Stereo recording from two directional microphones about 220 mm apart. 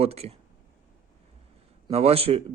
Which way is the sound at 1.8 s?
25° right (ahead or behind).